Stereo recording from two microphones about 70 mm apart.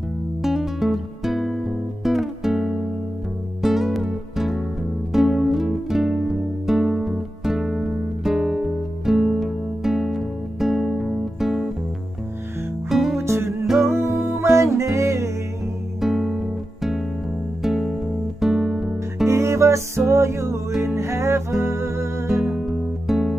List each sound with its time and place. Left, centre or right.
0.4 s music: centre
12.9 s music: centre
13.2 s music: right
16.0 s guitar: centre
17.6 s music: centre
19.2 s music: right
22.3 s music: centre